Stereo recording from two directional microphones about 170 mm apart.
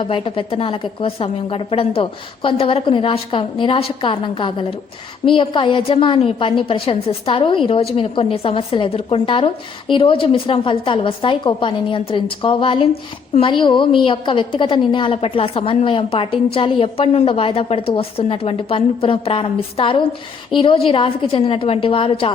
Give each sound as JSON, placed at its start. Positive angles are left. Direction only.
{"t": 0.0, "sound": "a woman's voice", "side_deg": 30}